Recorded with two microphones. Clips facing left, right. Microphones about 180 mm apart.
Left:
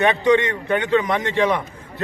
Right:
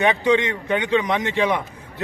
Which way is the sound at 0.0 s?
15° right (ahead or behind).